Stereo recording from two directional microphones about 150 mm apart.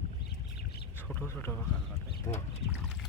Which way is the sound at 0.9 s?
10° left (ahead or behind).